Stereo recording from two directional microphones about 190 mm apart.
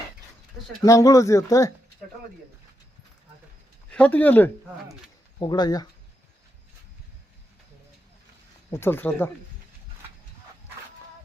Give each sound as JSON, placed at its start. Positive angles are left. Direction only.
{"t": 0.9, "sound": "speech", "side_deg": 15}
{"t": 3.8, "sound": "speech", "side_deg": 5}
{"t": 5.4, "sound": "speech", "side_deg": 20}
{"t": 8.7, "sound": "speech", "side_deg": 10}